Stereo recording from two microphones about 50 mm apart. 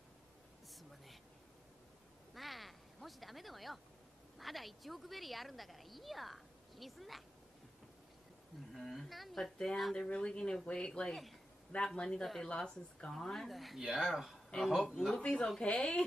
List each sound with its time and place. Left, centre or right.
2.3 s quack: centre
4.4 s a woman's voice: centre
8.7 s a woman's voice: centre
9.9 s speech: centre
12.2 s a woman's voice: centre
13.7 s speech: centre
14.0 s a woman's voice: centre
15.0 s a woman's voice: centre; by 16.0 s left